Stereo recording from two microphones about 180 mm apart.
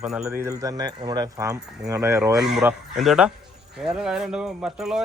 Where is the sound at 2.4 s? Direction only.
5° right (ahead or behind).